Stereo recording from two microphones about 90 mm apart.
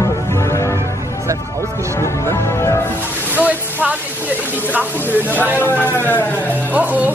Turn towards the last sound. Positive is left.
turn(degrees=-20)  # may be behind; listen again after turning